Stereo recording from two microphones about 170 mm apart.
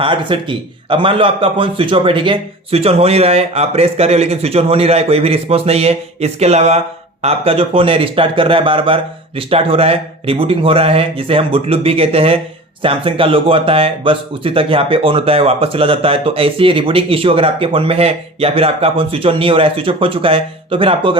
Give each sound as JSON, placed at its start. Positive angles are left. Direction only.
{"t": 0.0, "sound": "speech", "side_deg": -30}